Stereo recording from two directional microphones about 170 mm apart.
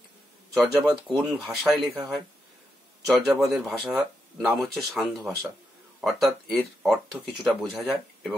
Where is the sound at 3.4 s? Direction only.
Centre (ahead or behind).